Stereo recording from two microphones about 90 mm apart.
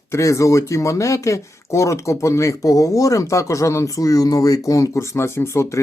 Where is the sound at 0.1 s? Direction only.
35° left (ahead or behind).